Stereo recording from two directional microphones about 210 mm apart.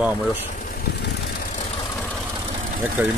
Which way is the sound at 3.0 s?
5° right (ahead or behind).